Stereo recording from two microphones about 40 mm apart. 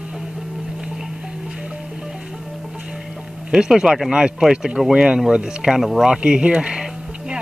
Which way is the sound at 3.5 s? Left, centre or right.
Centre.